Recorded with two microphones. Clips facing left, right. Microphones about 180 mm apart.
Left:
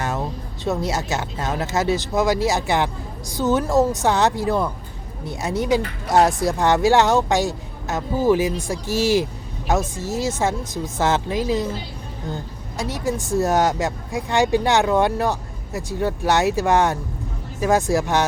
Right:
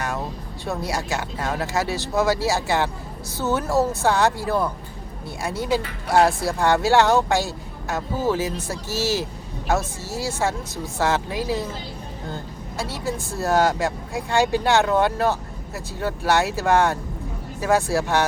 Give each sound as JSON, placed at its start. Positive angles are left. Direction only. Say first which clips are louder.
{"t": 0.6, "sound": "speech", "louder": "left 4 dB", "side_deg": 20}